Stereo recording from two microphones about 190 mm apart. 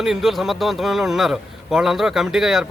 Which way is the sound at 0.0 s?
Centre (ahead or behind).